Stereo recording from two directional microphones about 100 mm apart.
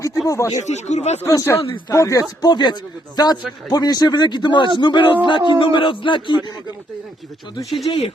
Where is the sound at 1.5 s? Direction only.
65° left (ahead or behind).